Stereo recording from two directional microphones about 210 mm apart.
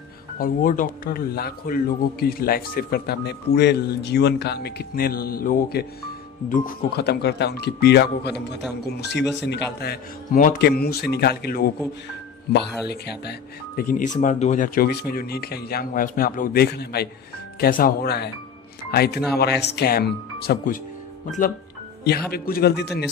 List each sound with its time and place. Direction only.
0.4 s speech: 40° left (ahead or behind)
12.8 s speech: 50° left (ahead or behind)
22.0 s speech: 50° left (ahead or behind)